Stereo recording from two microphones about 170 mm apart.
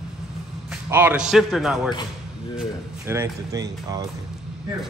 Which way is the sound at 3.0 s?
20° right (ahead or behind).